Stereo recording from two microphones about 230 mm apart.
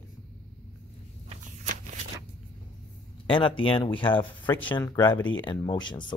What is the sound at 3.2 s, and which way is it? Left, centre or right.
Speech, left.